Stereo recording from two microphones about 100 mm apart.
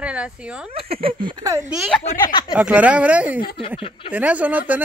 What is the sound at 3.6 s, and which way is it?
Speech, 65° left (ahead or behind).